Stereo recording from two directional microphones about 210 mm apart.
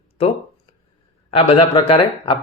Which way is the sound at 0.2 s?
30° left (ahead or behind).